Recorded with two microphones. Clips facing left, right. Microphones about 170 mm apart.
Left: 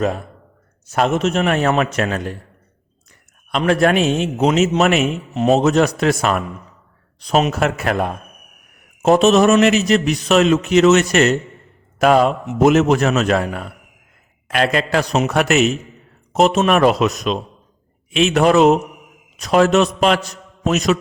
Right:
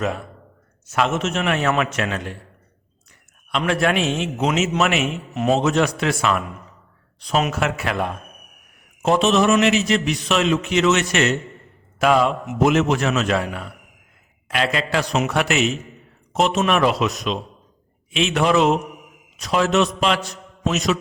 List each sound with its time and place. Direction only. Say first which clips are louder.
0.0 s a man's voice: left 4 dB; 40° left (ahead or behind)
3.5 s a man's voice: left 5 dB; 40° left (ahead or behind)
5.3 s a man's voice: left 4 dB; 30° left (ahead or behind)
5.5 s a man's voice: left 4 dB; 40° left (ahead or behind)